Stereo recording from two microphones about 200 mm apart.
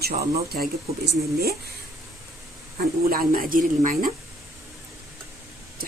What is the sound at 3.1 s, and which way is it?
Speech, 45° right (ahead or behind).